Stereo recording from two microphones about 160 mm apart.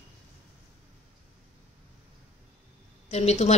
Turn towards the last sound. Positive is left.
turn(degrees=45)  # may be behind; listen again after turning